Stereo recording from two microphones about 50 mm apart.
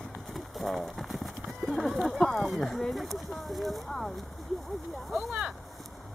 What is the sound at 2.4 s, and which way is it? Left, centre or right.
Speech, centre.